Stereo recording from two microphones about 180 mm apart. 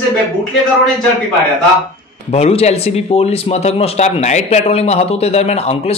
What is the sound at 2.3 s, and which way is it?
A man's voice, 35° left (ahead or behind).